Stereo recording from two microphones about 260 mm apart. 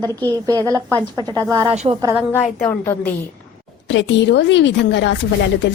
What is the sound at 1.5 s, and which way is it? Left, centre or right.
Speech, centre.